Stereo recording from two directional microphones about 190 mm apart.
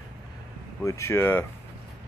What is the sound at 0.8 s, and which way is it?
Speech, 15° left (ahead or behind).